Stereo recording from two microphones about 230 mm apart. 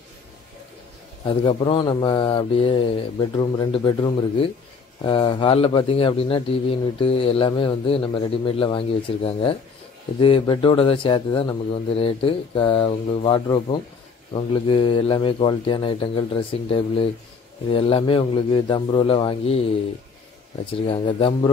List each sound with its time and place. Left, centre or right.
1.2 s a man's voice: left
20.8 s a man's voice: left